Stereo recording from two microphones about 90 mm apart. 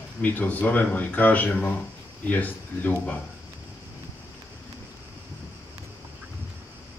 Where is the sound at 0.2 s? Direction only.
20° left (ahead or behind).